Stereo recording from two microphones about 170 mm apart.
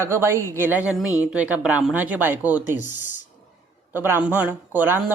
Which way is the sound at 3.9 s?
10° right (ahead or behind).